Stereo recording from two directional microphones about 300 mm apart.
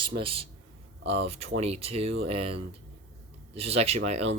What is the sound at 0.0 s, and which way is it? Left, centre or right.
A man's voice, centre.